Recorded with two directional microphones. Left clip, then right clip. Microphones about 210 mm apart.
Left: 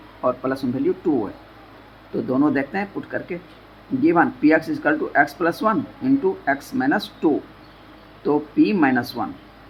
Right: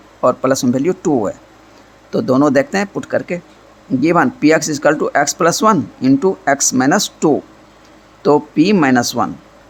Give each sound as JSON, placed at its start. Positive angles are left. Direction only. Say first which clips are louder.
{"t": 0.2, "sound": "speech", "louder": "right 9 dB", "side_deg": -55}